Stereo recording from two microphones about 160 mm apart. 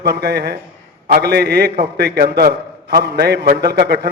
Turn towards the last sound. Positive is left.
turn(degrees=-90)